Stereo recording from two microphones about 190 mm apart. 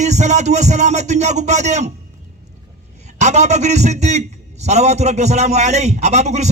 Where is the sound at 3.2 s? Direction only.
35° right (ahead or behind).